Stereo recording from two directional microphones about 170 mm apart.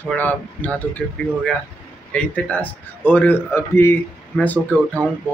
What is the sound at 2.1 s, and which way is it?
Speech, 10° left (ahead or behind).